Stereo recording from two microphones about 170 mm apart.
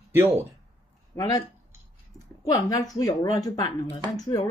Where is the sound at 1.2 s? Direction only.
20° left (ahead or behind).